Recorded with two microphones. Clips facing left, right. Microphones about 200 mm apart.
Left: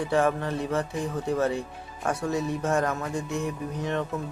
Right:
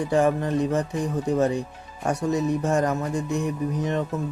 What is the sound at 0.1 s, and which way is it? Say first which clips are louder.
Speech: right 4 dB; 15° right (ahead or behind).